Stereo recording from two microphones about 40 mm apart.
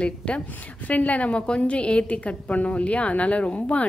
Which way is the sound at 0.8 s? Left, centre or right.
Left.